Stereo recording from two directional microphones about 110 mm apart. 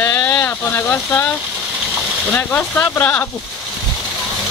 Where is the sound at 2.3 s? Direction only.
15° left (ahead or behind).